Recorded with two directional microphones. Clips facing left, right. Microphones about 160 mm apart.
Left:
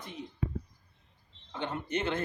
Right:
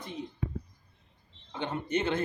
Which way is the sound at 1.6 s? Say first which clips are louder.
Right 2 dB; 20° right (ahead or behind).